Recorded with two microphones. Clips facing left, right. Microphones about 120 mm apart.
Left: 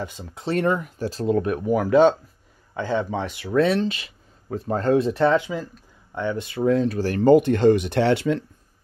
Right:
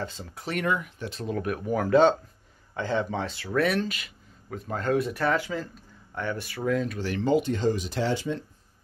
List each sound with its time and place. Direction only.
0.0 s speech: 15° left (ahead or behind); by 1.2 s 40° left (ahead or behind)
1.2 s speech: 25° left (ahead or behind); by 8.5 s 70° left (ahead or behind)